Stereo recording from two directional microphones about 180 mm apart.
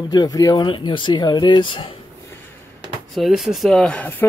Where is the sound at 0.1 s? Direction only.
20° left (ahead or behind).